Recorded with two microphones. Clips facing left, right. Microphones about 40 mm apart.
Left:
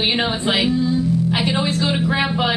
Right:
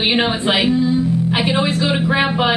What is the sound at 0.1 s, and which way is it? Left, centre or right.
Speech, centre.